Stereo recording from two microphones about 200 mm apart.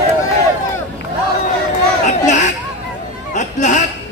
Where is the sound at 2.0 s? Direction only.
35° left (ahead or behind).